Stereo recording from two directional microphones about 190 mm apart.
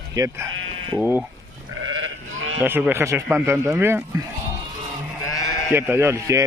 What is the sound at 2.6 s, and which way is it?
Speech, 10° right (ahead or behind).